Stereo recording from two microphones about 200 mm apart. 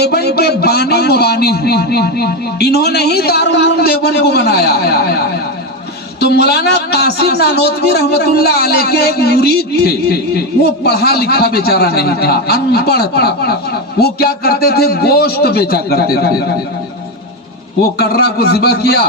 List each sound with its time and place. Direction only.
0.0 s a man's voice: 55° left (ahead or behind)
17.9 s a man's voice: 55° left (ahead or behind)